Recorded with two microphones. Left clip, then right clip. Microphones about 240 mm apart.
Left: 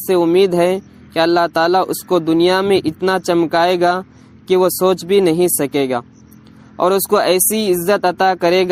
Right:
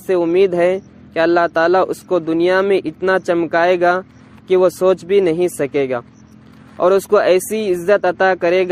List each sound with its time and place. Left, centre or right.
0.1 s speech: left